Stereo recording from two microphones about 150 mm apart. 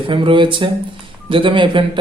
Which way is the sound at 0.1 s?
35° right (ahead or behind).